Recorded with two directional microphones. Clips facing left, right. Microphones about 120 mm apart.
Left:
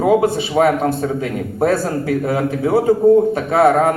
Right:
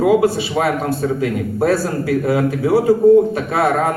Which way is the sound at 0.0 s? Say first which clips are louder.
Even; 25° left (ahead or behind).